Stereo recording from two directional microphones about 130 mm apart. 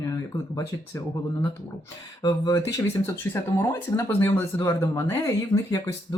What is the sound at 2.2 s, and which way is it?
Speech, 25° left (ahead or behind).